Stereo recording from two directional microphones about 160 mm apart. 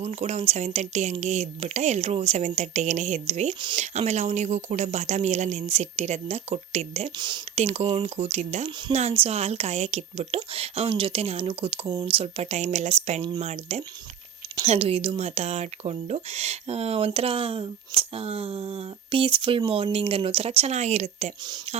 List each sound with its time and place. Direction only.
0.0 s speech: 45° right (ahead or behind)
7.2 s speech: 25° right (ahead or behind)
7.5 s speech: 40° right (ahead or behind)